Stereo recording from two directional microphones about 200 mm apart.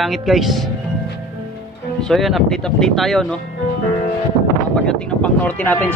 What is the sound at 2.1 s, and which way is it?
Speech, centre (ahead or behind).